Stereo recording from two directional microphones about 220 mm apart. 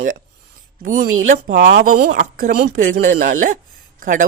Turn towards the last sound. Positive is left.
turn(degrees=-35)  # may be behind; listen again after turning